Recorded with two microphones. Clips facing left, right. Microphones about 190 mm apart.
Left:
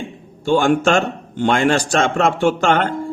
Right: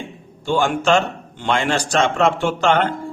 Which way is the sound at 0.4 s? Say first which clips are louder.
Left 3 dB; 45° left (ahead or behind).